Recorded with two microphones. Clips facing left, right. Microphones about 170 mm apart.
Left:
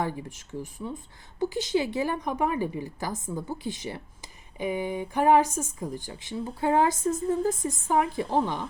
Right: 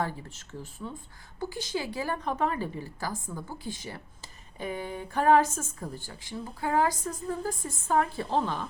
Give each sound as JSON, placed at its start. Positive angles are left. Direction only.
{"t": 0.0, "sound": "speech", "side_deg": 15}